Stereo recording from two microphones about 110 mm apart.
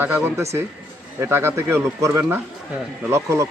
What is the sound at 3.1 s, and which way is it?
Speech, 25° right (ahead or behind).